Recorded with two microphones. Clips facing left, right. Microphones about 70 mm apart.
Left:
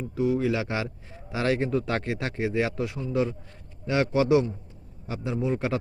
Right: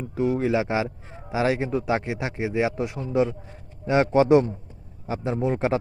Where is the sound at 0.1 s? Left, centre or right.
Right.